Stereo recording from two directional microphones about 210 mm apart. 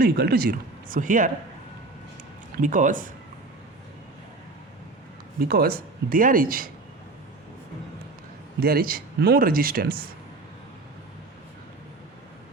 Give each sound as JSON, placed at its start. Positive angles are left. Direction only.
{"t": 0.0, "sound": "speech", "side_deg": -45}
{"t": 2.6, "sound": "speech", "side_deg": -35}
{"t": 5.5, "sound": "speech", "side_deg": -45}
{"t": 8.6, "sound": "speech", "side_deg": -45}